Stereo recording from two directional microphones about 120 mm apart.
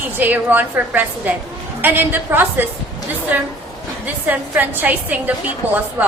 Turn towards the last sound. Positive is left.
turn(degrees=-15)  # may be behind; listen again after turning